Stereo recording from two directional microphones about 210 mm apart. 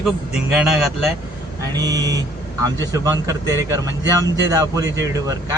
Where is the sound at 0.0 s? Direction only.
5° right (ahead or behind).